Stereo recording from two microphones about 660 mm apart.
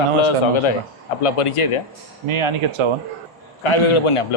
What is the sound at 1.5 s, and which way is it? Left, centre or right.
Speech, left.